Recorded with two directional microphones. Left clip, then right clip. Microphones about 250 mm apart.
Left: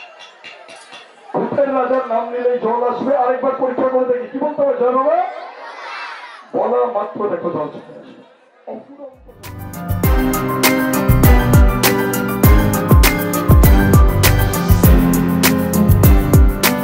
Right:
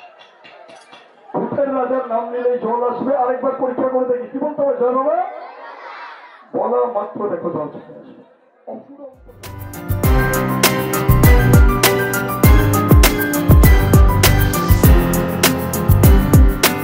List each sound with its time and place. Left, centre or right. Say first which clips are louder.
1.3 s a man's voice: left 3 dB; centre
9.7 s music: even; centre